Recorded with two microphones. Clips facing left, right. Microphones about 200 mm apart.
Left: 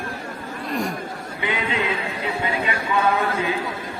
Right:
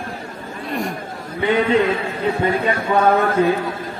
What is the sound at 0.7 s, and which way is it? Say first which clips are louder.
Speech: right 1 dB; centre (ahead or behind).